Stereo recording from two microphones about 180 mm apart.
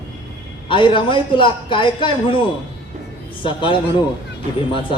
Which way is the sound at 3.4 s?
30° left (ahead or behind).